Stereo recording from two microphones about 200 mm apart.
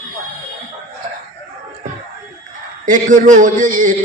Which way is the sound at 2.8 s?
40° right (ahead or behind).